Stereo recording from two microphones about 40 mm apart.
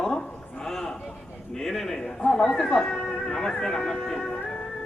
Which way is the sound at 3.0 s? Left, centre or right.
Left.